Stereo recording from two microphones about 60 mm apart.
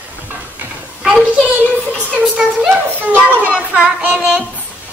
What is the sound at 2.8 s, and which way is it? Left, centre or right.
Child singing, right.